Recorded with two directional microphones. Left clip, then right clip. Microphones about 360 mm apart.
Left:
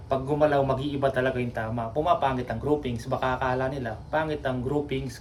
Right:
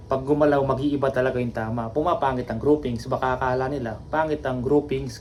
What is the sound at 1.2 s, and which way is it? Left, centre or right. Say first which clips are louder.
Speech: right 3 dB; left.